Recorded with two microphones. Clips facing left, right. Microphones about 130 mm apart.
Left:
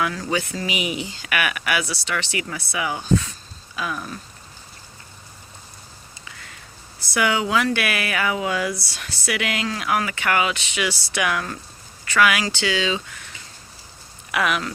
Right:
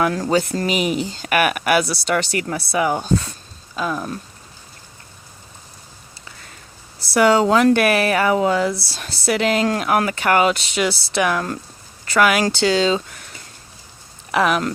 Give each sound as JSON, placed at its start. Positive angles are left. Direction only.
{"t": 0.0, "sound": "speech", "side_deg": -45}
{"t": 7.1, "sound": "speech", "side_deg": -40}
{"t": 8.5, "sound": "speech", "side_deg": -30}